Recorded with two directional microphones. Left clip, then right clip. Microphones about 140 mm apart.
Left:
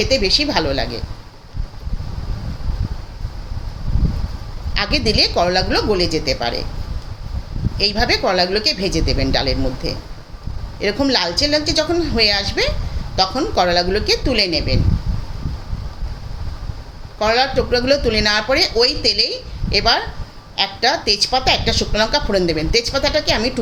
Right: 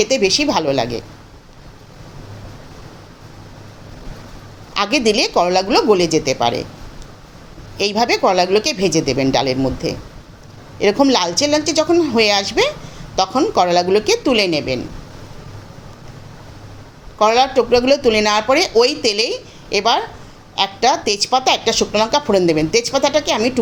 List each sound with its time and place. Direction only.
0.0 s a woman's voice: 45° right (ahead or behind)
4.7 s a woman's voice: 45° right (ahead or behind)
7.8 s a woman's voice: 40° right (ahead or behind)
17.2 s a woman's voice: 45° right (ahead or behind)